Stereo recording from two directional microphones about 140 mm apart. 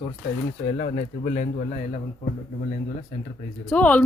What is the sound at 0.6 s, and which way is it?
Speech, 55° left (ahead or behind).